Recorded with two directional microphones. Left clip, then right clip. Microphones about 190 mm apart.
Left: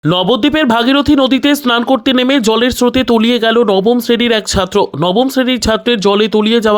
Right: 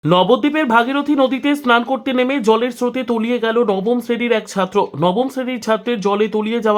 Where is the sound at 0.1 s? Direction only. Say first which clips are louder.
Left 2 dB; 35° left (ahead or behind).